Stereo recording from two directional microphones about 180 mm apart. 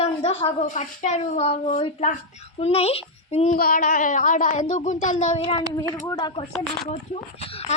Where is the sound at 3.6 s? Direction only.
50° left (ahead or behind).